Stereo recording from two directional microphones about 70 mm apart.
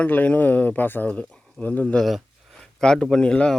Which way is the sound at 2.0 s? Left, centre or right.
Centre.